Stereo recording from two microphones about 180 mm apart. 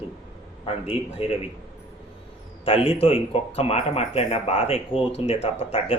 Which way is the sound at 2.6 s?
30° left (ahead or behind).